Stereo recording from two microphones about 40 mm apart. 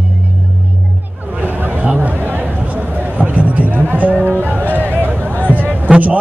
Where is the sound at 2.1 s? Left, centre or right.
Right.